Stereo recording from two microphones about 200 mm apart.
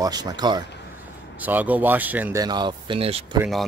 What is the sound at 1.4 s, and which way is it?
Speech, 10° right (ahead or behind).